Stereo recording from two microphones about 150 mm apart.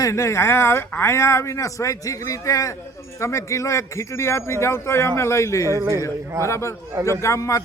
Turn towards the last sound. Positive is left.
turn(degrees=20)  # may be behind; listen again after turning